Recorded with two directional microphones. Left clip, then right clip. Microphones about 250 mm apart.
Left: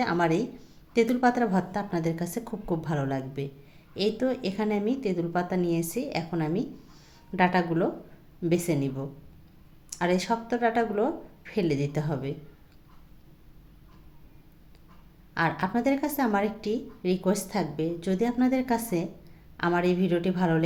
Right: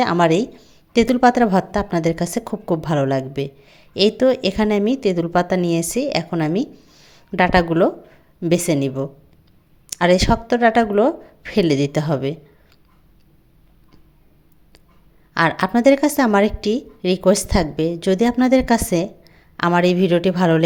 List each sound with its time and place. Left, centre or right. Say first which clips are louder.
0.0 s a woman's voice: right 10 dB; right
15.4 s a woman's voice: right 10 dB; right